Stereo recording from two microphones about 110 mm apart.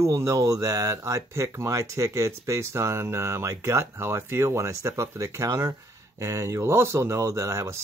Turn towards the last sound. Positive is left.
turn(degrees=-25)  # may be behind; listen again after turning